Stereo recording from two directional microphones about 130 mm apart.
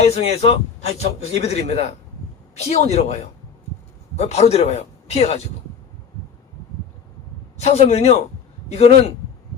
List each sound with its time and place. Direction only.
0.0 s a man's voice: 55° left (ahead or behind)
4.2 s a man's voice: 55° left (ahead or behind)
7.6 s a man's voice: 55° left (ahead or behind)